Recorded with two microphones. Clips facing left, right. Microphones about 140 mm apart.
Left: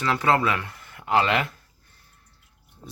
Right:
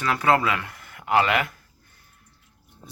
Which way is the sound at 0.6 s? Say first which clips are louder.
Even; 25° left (ahead or behind).